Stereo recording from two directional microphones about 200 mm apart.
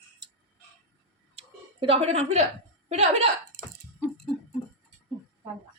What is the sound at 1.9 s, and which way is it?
A woman's voice, 30° right (ahead or behind).